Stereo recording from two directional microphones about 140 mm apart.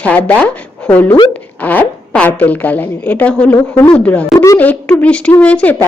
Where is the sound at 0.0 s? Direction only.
10° left (ahead or behind).